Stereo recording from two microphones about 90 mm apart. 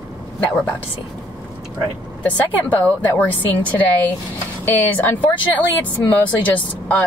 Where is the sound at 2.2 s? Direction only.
15° left (ahead or behind).